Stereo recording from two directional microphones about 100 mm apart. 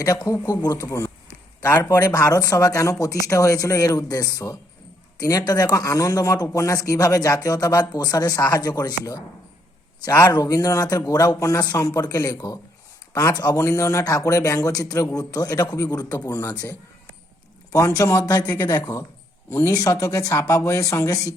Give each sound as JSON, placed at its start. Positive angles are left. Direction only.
{"t": 0.0, "sound": "speech", "side_deg": 35}
{"t": 18.4, "sound": "speech", "side_deg": 20}
{"t": 18.7, "sound": "speech", "side_deg": 35}